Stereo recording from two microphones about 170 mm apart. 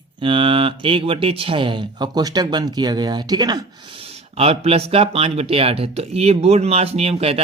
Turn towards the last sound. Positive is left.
turn(degrees=-35)  # may be behind; listen again after turning